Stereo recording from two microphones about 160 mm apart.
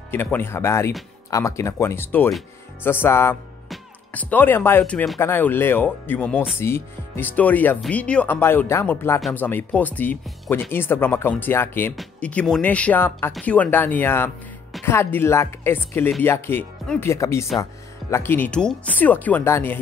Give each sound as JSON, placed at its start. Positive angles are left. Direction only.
{"t": 0.1, "sound": "speech", "side_deg": 15}